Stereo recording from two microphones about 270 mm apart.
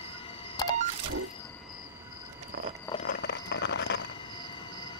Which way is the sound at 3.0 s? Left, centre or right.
Left.